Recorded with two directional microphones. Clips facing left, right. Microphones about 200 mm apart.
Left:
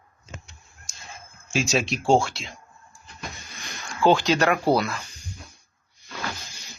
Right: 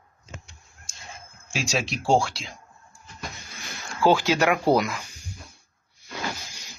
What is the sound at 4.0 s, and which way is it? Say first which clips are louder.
Speech: left 1 dB; 5° right (ahead or behind).